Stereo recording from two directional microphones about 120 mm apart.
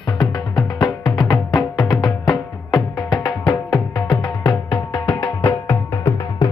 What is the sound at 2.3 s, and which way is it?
Music, 5° left (ahead or behind).